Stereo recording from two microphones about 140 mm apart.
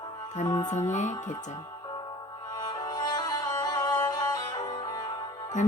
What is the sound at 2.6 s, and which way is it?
Music, 30° left (ahead or behind).